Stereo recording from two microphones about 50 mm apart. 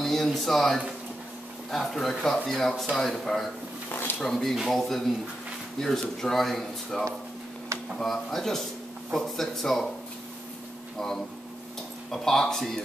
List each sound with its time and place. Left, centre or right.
0.0 s a man's voice: centre
3.9 s a sound: left
4.2 s a man's voice: centre
11.0 s speech: centre